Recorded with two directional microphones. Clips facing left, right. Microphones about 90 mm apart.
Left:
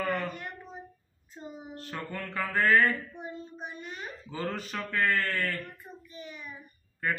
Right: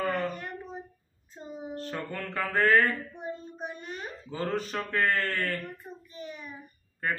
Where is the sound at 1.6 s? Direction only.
30° right (ahead or behind).